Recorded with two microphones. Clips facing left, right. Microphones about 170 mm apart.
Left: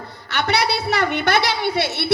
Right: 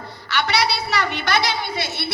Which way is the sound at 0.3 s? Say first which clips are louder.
Left 1 dB; 50° left (ahead or behind).